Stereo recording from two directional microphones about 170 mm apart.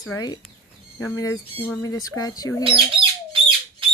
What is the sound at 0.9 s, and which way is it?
Speech, 15° left (ahead or behind).